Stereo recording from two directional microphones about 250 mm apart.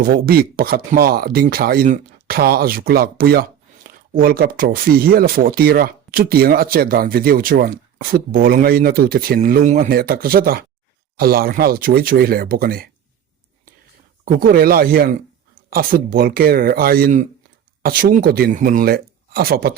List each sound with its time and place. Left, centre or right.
0.0 s speech: right
14.3 s speech: right